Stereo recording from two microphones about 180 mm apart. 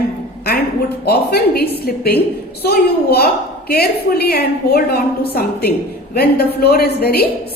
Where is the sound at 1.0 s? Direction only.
60° left (ahead or behind).